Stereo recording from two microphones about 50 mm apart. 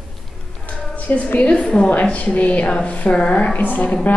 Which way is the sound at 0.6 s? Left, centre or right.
Left.